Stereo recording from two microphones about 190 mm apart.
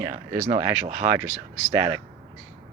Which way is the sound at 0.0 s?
10° right (ahead or behind).